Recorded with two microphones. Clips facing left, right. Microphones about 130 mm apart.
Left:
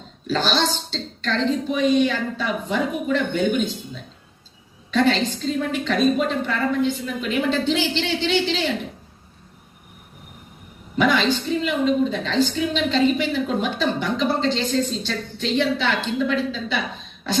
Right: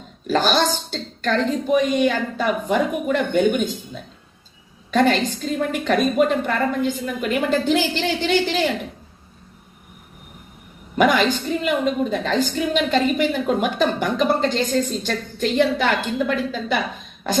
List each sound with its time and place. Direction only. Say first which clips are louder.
0.3 s a woman's voice: right 3 dB; 50° right (ahead or behind)
4.9 s a woman's voice: right 2 dB; 50° right (ahead or behind)
10.9 s a woman's voice: right 2 dB; 50° right (ahead or behind)